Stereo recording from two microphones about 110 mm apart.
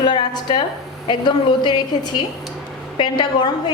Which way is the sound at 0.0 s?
45° left (ahead or behind).